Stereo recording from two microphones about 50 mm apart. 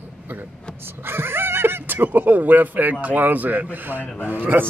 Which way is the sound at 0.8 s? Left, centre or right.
Right.